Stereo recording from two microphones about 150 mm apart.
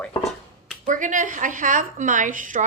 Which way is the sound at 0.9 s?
60° right (ahead or behind).